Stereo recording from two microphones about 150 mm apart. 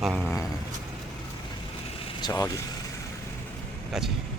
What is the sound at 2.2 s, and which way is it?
Speech, 20° left (ahead or behind).